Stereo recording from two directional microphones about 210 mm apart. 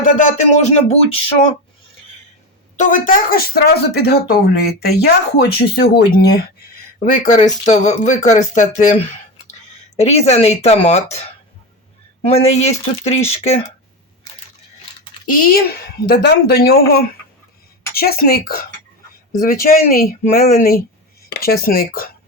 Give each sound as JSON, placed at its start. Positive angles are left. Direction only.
{"t": 0.0, "sound": "speech", "side_deg": 40}
{"t": 2.7, "sound": "speech", "side_deg": 40}
{"t": 10.0, "sound": "speech", "side_deg": 30}
{"t": 12.2, "sound": "speech", "side_deg": 30}
{"t": 15.3, "sound": "speech", "side_deg": 45}